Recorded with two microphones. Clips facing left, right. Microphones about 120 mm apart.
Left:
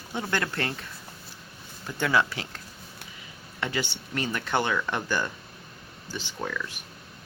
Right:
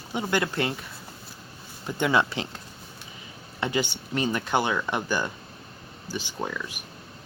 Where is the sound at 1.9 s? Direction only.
20° right (ahead or behind).